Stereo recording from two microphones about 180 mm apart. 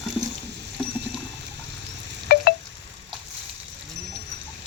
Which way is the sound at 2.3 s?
60° left (ahead or behind).